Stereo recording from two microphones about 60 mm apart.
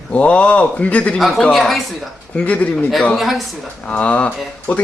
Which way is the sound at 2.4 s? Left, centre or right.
Left.